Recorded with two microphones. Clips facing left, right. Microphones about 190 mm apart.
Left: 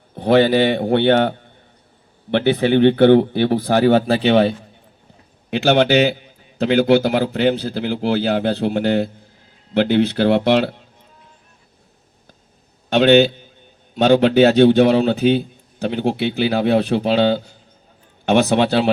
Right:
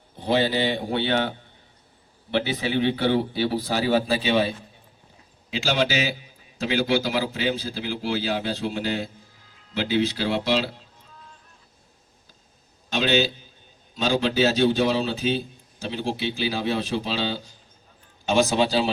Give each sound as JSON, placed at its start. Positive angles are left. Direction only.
{"t": 0.1, "sound": "a man's voice", "side_deg": 60}
{"t": 12.9, "sound": "a man's voice", "side_deg": 60}